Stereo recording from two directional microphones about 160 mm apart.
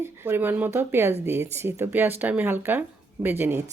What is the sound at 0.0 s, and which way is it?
A woman's voice, 15° right (ahead or behind).